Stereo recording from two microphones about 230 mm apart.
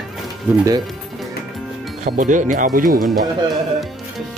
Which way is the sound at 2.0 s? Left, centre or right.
Right.